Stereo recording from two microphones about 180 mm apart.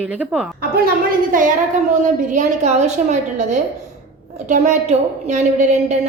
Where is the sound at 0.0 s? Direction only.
5° right (ahead or behind).